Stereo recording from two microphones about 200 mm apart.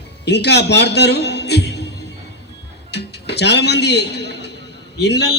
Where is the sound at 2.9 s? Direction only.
55° left (ahead or behind).